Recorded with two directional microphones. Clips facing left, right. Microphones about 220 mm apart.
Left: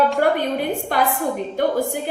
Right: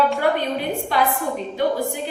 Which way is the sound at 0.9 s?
50° left (ahead or behind).